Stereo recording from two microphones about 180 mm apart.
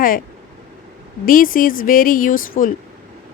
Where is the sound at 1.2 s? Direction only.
50° left (ahead or behind).